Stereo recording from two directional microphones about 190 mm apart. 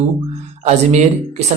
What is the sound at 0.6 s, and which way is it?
Speech, 35° right (ahead or behind).